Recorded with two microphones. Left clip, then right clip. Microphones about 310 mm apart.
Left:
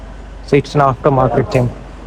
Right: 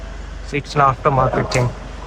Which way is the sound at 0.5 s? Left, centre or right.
Centre.